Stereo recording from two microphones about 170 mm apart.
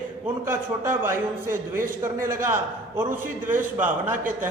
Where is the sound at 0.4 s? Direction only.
15° right (ahead or behind).